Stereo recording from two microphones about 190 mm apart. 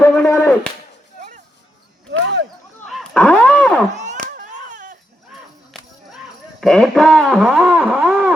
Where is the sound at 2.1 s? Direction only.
65° right (ahead or behind).